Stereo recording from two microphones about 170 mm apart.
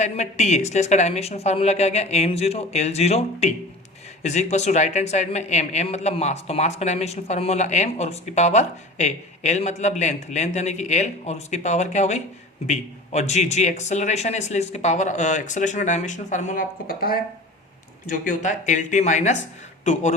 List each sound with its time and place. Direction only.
0.0 s a woman's voice: 40° left (ahead or behind)